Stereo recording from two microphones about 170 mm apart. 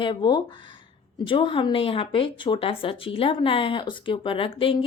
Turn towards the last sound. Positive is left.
turn(degrees=30)  # may be behind; listen again after turning